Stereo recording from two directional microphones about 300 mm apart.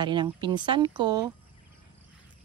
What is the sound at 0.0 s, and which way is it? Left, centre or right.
Speech, centre.